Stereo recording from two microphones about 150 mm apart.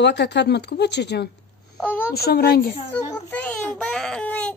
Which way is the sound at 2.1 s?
90° left.